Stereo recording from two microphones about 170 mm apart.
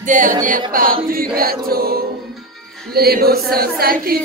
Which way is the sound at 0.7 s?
55° right (ahead or behind).